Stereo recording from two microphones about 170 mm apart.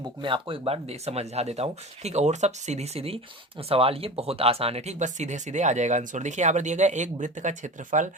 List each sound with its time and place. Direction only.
0.2 s speech: 30° right (ahead or behind); by 8.1 s 50° right (ahead or behind)